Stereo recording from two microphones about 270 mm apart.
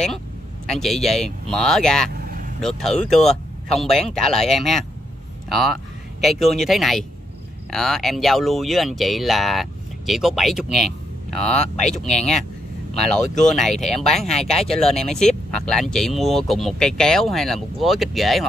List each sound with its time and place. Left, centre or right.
0.7 s speech: centre
2.1 s vehicle: right
2.6 s speech: centre
12.0 s speech: centre